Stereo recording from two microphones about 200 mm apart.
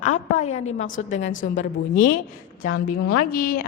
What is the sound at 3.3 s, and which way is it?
Speech, 45° left (ahead or behind).